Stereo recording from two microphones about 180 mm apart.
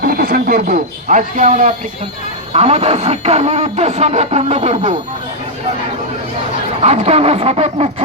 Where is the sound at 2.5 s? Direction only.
35° right (ahead or behind).